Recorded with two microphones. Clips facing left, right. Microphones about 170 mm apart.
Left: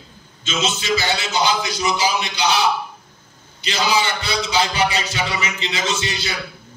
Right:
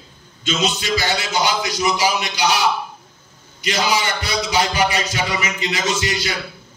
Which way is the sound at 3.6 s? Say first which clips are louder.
Even; 30° left (ahead or behind).